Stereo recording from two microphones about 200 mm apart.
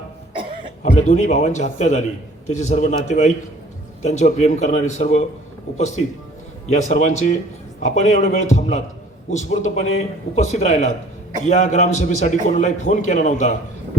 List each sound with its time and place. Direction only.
0.8 s a man's voice: 35° left (ahead or behind)
6.7 s a man's voice: 35° left (ahead or behind)